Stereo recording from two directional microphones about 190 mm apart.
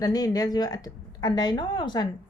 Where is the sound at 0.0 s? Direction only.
20° left (ahead or behind).